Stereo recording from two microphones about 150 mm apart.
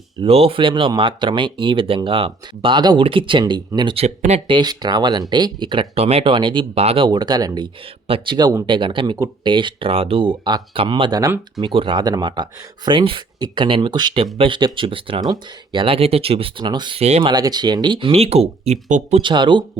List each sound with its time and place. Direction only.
0.2 s speech: 40° right (ahead or behind)
4.0 s speech: 50° right (ahead or behind)
4.4 s speech: 30° right (ahead or behind)
9.1 s speech: 20° right (ahead or behind)
9.5 s speech: 30° right (ahead or behind)
17.0 s speech: 45° right (ahead or behind)
17.3 s speech: 25° right (ahead or behind); by 19.2 s 50° right (ahead or behind)
19.2 s speech: 30° right (ahead or behind)